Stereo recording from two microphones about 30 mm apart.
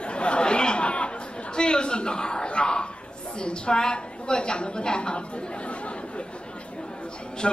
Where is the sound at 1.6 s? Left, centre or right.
Left.